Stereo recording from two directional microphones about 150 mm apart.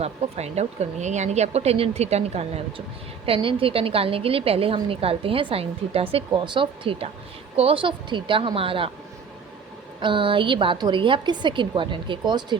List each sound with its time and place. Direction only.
0.0 s a woman's voice: 45° right (ahead or behind)
10.0 s a woman's voice: 35° right (ahead or behind)